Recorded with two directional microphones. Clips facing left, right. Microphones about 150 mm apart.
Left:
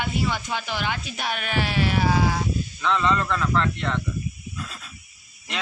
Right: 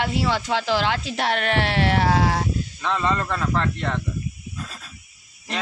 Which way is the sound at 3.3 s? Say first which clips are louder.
Even; 40° right (ahead or behind).